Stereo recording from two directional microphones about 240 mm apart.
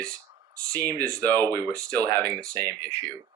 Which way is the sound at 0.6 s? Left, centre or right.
Centre.